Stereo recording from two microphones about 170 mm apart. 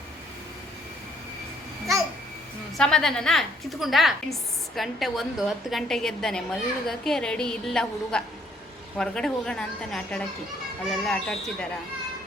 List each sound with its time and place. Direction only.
2.7 s a woman's voice: 5° left (ahead or behind)